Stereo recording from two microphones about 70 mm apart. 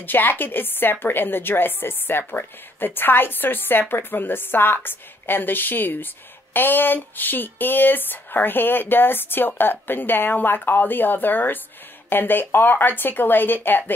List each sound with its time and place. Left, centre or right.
0.0 s a woman's voice: left